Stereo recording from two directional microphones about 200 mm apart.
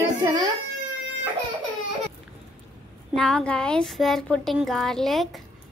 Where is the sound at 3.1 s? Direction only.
5° left (ahead or behind).